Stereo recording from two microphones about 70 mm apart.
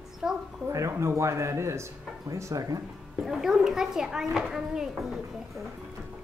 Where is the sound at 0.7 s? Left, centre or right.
Right.